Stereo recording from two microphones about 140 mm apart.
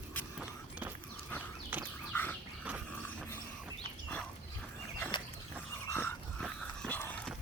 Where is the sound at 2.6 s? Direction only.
10° right (ahead or behind).